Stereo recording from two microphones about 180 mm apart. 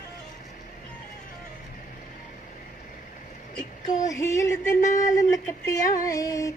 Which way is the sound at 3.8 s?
20° left (ahead or behind).